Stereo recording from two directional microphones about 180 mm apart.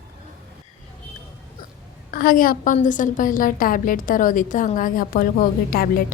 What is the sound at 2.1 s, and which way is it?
A woman's voice, 50° left (ahead or behind).